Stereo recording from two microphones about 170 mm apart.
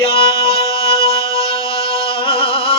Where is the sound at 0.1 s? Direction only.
35° left (ahead or behind).